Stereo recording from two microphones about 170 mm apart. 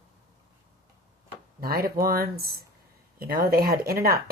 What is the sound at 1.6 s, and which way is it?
Speech, 60° right (ahead or behind).